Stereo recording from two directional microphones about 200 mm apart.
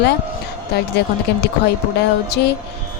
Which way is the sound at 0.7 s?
55° left (ahead or behind).